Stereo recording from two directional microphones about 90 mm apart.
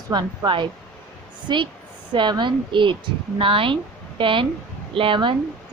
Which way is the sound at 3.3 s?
80° right.